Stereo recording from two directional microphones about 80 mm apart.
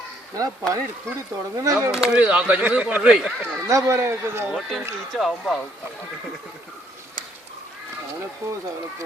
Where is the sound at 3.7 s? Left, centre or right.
Right.